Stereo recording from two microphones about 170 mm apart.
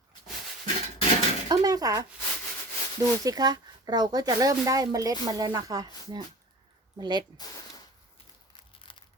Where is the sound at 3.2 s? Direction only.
25° right (ahead or behind).